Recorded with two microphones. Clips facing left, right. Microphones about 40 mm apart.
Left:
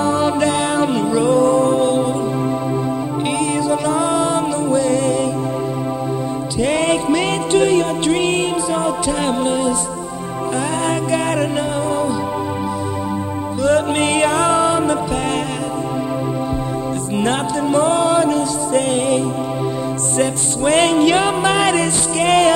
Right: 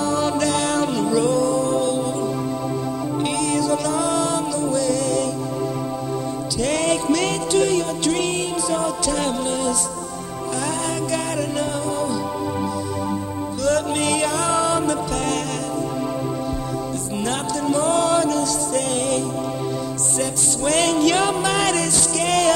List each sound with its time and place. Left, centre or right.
0.0 s music: left
3.3 s music: left
6.6 s music: left
13.7 s music: left
17.2 s music: left